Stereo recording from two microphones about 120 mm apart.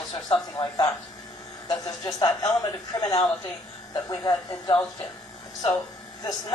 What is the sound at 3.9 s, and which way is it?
Speech, 35° left (ahead or behind).